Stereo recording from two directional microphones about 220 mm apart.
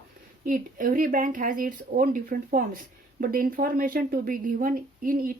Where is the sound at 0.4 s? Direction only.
40° right (ahead or behind).